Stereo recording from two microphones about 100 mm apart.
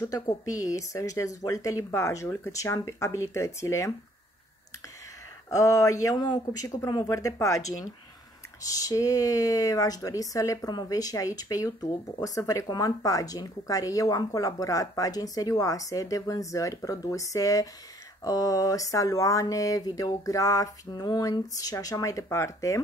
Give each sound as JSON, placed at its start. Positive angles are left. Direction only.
{"t": 0.1, "sound": "speech", "side_deg": 35}
{"t": 5.5, "sound": "speech", "side_deg": 35}